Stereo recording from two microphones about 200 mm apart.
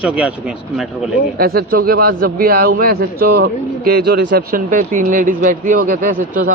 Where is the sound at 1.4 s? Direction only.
50° right (ahead or behind).